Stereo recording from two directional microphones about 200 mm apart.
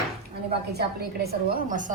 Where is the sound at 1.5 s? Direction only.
40° right (ahead or behind).